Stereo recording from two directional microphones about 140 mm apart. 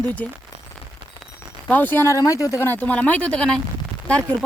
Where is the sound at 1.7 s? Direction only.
15° left (ahead or behind).